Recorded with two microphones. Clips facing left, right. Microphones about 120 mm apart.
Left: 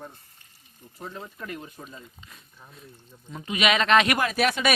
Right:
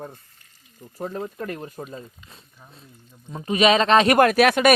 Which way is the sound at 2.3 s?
30° right (ahead or behind).